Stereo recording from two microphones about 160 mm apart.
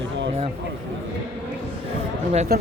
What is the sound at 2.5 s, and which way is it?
Speech, 75° right (ahead or behind).